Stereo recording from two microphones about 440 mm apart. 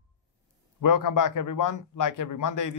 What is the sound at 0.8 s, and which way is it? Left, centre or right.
A man's voice, left.